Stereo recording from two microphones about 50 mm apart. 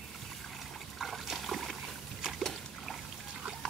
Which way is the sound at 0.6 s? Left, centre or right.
Centre.